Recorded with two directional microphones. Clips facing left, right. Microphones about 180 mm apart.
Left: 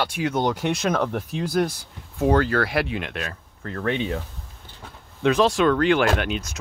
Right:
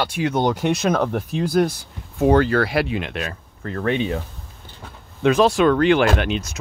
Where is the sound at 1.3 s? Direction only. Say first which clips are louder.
Right 5 dB; 25° right (ahead or behind).